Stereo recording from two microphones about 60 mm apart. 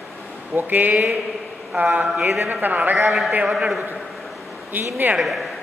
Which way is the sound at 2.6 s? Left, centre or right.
Right.